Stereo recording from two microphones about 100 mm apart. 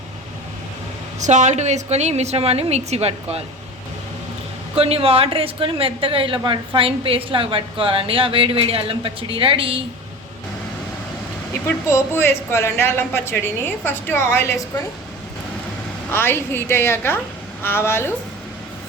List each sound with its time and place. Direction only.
1.9 s a woman's voice: 90° right
4.7 s a woman's voice: 75° right (ahead or behind)
11.9 s a woman's voice: 25° left (ahead or behind)
16.1 s a woman's voice: 25° left (ahead or behind)